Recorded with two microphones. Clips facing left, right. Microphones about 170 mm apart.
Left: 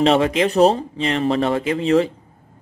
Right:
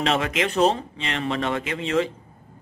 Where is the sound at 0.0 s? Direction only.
35° left (ahead or behind).